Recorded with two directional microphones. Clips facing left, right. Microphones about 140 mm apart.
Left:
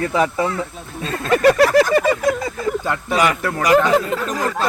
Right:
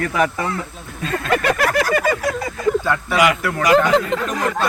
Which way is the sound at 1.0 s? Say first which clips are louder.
Left 4 dB; 30° left (ahead or behind).